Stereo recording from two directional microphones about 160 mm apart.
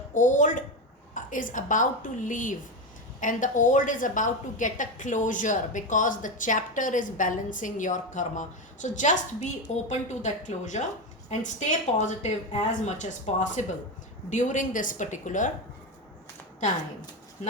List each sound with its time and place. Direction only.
0.1 s a woman's voice: 50° left (ahead or behind)